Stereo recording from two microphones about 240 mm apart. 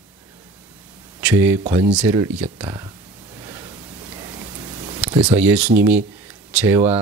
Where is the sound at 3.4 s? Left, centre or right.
Centre.